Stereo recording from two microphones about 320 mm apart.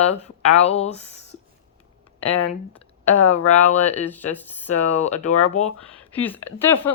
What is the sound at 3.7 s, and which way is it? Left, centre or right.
Speech, left.